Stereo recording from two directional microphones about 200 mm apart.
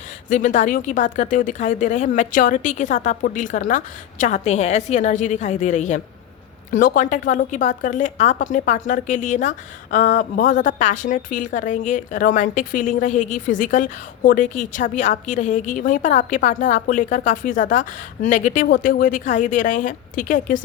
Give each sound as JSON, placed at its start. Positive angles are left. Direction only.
{"t": 0.3, "sound": "a woman's voice", "side_deg": 40}